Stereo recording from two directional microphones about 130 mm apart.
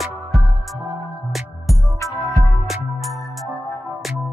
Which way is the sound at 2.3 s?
Centre (ahead or behind).